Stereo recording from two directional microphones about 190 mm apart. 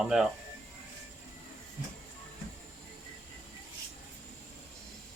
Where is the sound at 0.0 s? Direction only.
Centre (ahead or behind).